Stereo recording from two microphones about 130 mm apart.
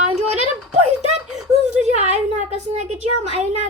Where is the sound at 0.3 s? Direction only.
60° right (ahead or behind).